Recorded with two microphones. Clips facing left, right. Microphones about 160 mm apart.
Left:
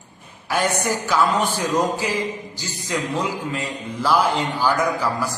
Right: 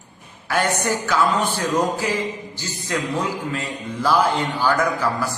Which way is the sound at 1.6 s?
10° left (ahead or behind).